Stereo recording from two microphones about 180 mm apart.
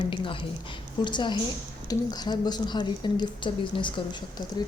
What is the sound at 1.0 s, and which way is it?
Speech, 25° left (ahead or behind).